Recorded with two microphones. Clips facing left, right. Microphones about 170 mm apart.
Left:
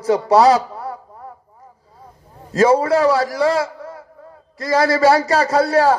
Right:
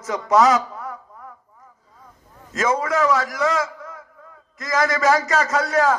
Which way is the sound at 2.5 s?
35° left (ahead or behind).